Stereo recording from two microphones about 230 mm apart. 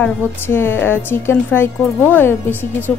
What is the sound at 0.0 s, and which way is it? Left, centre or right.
A woman's voice, centre.